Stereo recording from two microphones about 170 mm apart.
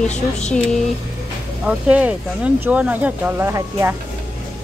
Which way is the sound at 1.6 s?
5° right (ahead or behind).